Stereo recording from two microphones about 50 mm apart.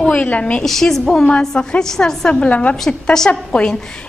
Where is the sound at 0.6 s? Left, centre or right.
Centre; by 2.8 s left.